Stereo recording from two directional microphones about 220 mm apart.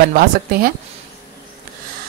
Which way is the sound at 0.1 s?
40° right (ahead or behind).